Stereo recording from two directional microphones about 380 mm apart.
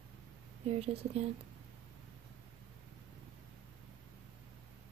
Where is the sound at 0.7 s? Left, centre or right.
Centre.